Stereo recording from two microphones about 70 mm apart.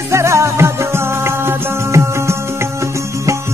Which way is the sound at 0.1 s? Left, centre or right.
Right.